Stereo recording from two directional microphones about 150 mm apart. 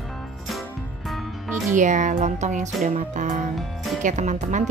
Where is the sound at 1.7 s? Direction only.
55° right (ahead or behind).